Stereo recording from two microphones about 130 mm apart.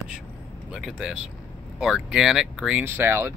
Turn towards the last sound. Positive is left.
turn(degrees=-20)  # may be behind; listen again after turning